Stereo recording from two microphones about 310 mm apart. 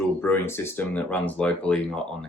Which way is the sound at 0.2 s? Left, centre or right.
Centre.